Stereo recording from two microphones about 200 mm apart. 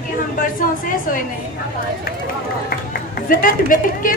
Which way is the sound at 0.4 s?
45° left (ahead or behind).